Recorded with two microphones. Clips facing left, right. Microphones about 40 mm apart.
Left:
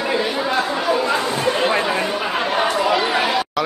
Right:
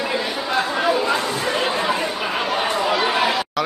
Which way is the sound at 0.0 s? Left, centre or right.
Centre.